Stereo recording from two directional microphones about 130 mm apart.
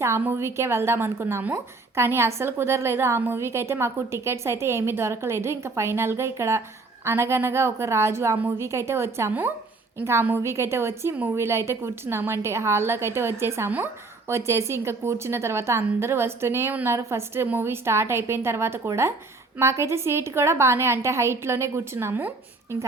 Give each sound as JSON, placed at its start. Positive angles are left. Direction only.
{"t": 0.0, "sound": "a woman's voice", "side_deg": -20}